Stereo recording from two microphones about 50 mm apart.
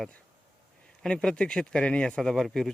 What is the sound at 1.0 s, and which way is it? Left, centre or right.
Speech, centre.